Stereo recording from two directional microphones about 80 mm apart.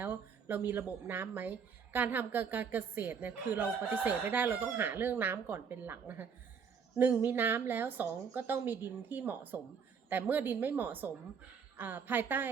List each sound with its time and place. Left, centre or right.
0.0 s speech: right